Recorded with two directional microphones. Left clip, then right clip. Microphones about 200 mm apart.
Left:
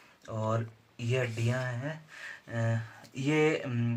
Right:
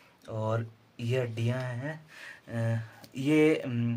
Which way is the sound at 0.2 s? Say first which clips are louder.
Even; 35° right (ahead or behind).